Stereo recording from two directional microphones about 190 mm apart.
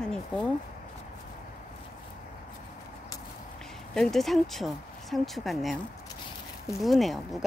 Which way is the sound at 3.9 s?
Centre (ahead or behind).